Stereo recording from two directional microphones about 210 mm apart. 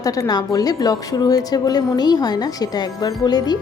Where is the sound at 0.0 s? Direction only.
15° left (ahead or behind).